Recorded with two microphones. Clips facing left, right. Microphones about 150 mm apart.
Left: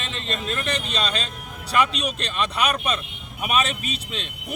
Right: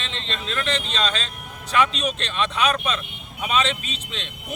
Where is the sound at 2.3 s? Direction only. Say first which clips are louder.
Right 1 dB; 10° left (ahead or behind).